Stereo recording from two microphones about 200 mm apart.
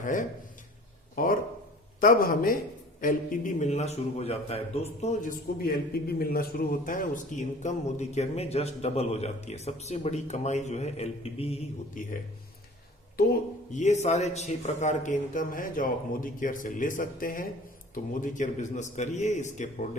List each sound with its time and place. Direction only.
0.0 s a man's voice: 40° left (ahead or behind)
5.6 s a man's voice: 50° left (ahead or behind)
13.1 s a man's voice: 40° left (ahead or behind)